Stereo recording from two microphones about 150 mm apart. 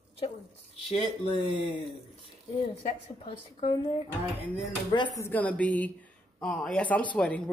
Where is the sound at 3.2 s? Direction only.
40° left (ahead or behind).